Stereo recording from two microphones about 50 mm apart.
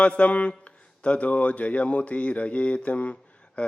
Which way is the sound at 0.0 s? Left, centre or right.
Left.